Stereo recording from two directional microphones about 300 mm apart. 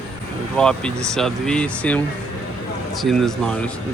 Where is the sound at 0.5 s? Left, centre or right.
Centre.